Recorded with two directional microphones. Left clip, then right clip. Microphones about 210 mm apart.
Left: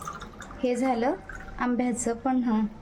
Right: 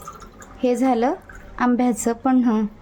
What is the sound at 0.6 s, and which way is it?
A woman's voice, 30° right (ahead or behind).